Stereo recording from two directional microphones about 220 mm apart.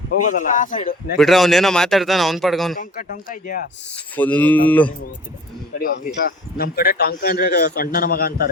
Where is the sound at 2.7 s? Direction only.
40° left (ahead or behind).